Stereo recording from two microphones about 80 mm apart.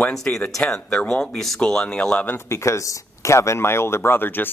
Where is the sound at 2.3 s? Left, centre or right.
Left.